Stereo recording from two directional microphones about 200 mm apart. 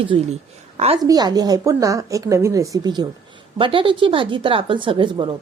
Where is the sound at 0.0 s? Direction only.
30° right (ahead or behind).